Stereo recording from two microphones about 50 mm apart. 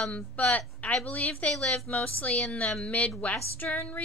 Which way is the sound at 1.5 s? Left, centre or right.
Centre.